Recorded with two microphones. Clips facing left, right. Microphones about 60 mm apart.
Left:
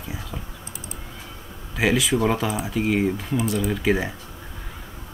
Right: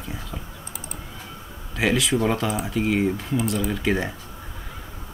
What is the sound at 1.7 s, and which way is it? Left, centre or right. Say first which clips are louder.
Speech: left 1 dB; centre.